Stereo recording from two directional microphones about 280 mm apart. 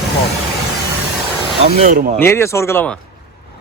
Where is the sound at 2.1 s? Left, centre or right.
Centre.